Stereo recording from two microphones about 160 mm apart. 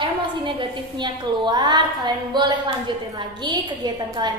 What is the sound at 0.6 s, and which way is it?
A woman's voice, 30° right (ahead or behind).